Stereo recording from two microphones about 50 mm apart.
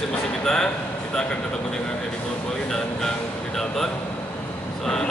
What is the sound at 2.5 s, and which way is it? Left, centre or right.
Music, centre.